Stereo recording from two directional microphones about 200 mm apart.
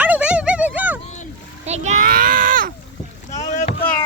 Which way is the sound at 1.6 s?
35° right (ahead or behind).